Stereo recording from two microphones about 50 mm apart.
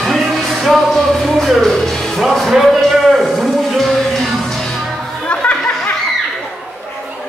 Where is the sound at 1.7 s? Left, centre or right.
Centre.